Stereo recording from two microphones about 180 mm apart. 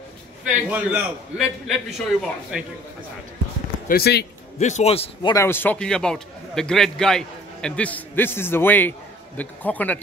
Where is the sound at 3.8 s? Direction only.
60° left (ahead or behind).